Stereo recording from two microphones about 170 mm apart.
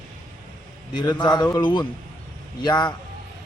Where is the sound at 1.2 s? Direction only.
25° left (ahead or behind).